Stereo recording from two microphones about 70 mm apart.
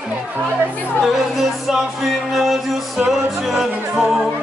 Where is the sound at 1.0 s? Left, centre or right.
Centre.